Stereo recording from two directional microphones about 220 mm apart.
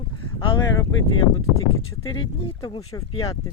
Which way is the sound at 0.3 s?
20° left (ahead or behind).